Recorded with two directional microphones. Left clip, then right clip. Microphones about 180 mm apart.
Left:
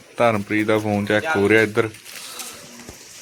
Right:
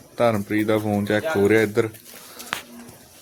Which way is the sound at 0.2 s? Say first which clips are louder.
Left 2 dB; centre (ahead or behind).